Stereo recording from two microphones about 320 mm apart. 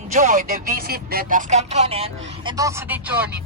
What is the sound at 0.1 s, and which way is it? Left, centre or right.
Speech, right.